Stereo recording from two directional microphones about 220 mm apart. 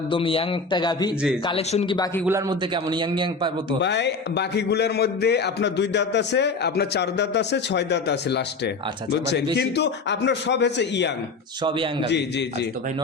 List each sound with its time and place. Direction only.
0.1 s a man's voice: 25° left (ahead or behind)
2.2 s a man's voice: 15° right (ahead or behind)
3.8 s a man's voice: 50° left (ahead or behind)
11.6 s a man's voice: 20° right (ahead or behind)
12.0 s a man's voice: 50° left (ahead or behind)